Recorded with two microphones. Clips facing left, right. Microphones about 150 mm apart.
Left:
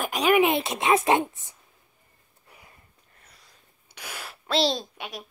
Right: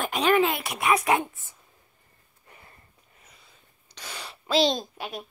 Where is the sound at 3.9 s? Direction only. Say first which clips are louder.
Left 1 dB; 10° left (ahead or behind).